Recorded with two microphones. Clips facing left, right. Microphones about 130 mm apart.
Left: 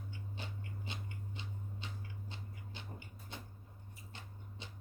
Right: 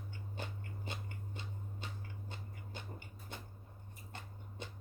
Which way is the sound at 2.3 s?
45° right (ahead or behind).